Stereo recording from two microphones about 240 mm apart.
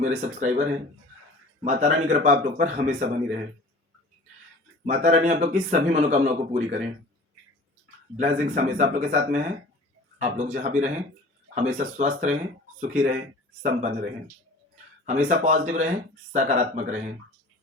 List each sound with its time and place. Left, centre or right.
0.0 s speech: right
4.9 s speech: right
8.1 s speech: right